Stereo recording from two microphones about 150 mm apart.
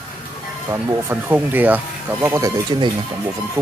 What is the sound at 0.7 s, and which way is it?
Speech, 15° right (ahead or behind).